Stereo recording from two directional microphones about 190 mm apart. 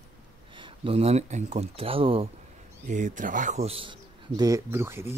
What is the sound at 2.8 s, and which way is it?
A man's voice, 40° right (ahead or behind).